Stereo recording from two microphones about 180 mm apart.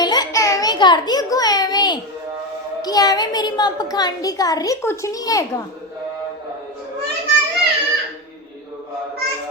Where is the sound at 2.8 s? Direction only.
20° left (ahead or behind).